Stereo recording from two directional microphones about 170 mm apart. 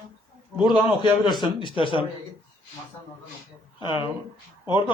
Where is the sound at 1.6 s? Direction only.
30° left (ahead or behind).